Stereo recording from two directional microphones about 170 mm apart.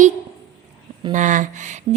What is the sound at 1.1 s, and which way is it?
Speech, 45° right (ahead or behind).